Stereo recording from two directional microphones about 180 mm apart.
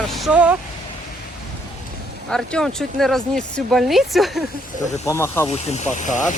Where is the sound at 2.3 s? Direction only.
5° left (ahead or behind).